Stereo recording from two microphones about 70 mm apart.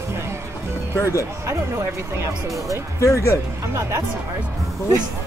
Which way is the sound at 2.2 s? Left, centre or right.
Right.